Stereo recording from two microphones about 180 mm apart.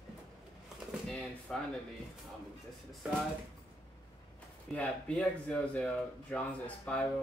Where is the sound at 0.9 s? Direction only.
Centre (ahead or behind).